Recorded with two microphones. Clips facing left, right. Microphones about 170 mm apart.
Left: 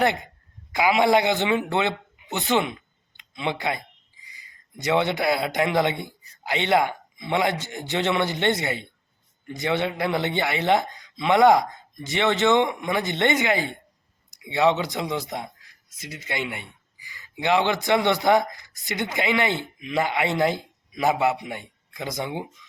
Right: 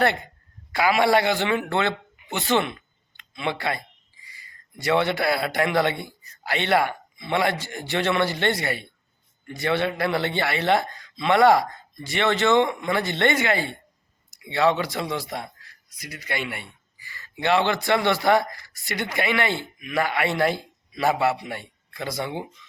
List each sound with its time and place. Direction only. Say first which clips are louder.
0.7 s a man's voice: even; 20° left (ahead or behind)